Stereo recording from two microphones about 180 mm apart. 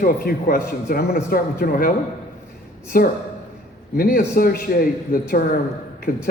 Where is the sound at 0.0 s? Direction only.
55° left (ahead or behind).